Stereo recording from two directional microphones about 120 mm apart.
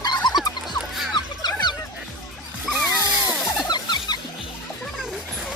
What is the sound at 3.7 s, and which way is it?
Music, 35° left (ahead or behind).